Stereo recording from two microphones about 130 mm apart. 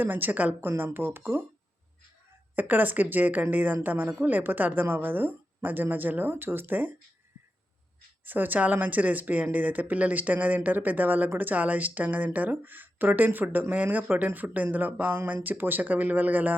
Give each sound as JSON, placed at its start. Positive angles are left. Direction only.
{"t": 0.0, "sound": "speech", "side_deg": -15}
{"t": 2.6, "sound": "speech", "side_deg": -15}
{"t": 8.2, "sound": "speech", "side_deg": -15}